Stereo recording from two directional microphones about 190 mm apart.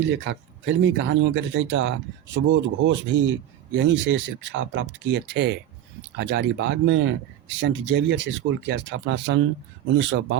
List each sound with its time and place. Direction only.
0.1 s speech: 75° right (ahead or behind)